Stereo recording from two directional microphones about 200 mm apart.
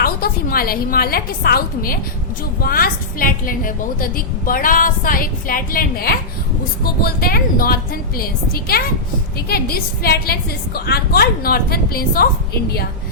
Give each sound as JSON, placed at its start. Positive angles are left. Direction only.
{"t": 0.0, "sound": "a woman's voice", "side_deg": 50}